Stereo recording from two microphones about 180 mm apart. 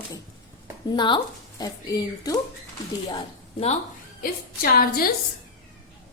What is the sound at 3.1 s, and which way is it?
Speech, 30° left (ahead or behind).